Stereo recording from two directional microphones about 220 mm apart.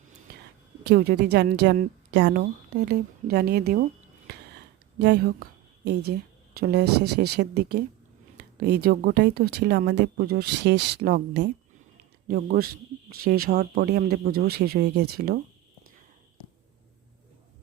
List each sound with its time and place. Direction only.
0.9 s speech: 45° right (ahead or behind)
4.9 s a woman's voice: 50° right (ahead or behind)